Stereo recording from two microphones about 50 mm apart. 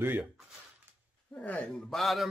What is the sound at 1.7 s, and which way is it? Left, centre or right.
Speech, centre.